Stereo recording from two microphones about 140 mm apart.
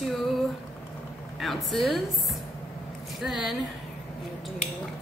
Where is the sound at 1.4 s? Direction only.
Centre (ahead or behind).